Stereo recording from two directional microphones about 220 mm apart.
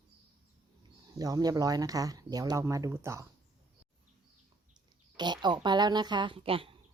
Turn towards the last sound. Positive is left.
turn(degrees=-25)  # may be behind; listen again after turning